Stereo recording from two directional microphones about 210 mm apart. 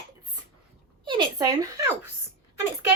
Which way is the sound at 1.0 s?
20° right (ahead or behind).